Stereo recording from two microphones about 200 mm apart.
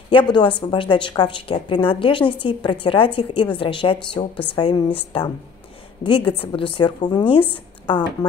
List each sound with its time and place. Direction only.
0.1 s a woman's voice: 20° left (ahead or behind)